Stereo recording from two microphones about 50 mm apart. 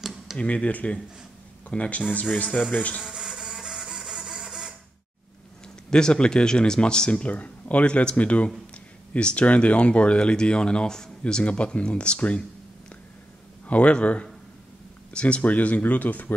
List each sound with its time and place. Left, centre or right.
0.0 s tick-tock: centre
0.4 s speech: left
3.0 s printer: centre
5.9 s speech: centre
13.7 s speech: left